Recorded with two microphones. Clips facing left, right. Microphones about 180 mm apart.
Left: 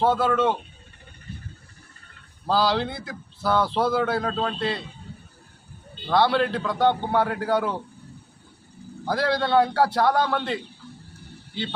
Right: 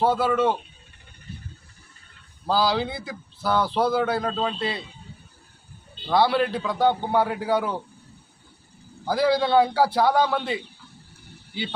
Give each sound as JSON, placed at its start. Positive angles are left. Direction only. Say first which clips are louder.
{"t": 0.0, "sound": "speech", "louder": "even", "side_deg": -5}
{"t": 2.5, "sound": "speech", "louder": "even", "side_deg": -5}
{"t": 6.1, "sound": "speech", "louder": "even", "side_deg": -5}
{"t": 9.0, "sound": "speech", "louder": "right 3 dB", "side_deg": 0}